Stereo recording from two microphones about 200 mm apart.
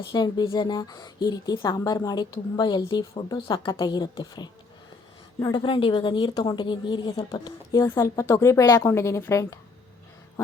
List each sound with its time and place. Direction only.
0.1 s a woman's voice: 20° left (ahead or behind)